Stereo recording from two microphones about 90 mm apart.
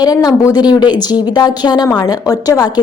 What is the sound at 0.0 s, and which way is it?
A woman's voice, 45° left (ahead or behind).